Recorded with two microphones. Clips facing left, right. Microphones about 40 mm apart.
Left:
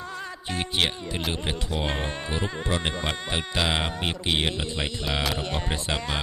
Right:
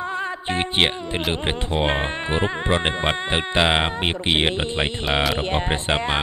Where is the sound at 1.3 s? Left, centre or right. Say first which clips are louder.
Right 6 dB; right.